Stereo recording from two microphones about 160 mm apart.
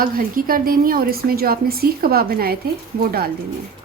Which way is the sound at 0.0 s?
60° right (ahead or behind).